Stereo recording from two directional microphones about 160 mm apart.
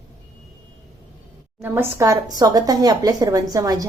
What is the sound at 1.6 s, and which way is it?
Speech, 15° right (ahead or behind).